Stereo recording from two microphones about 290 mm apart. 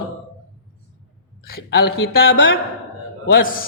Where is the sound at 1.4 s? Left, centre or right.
Left.